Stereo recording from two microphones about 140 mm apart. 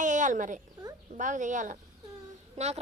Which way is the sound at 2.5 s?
50° right (ahead or behind).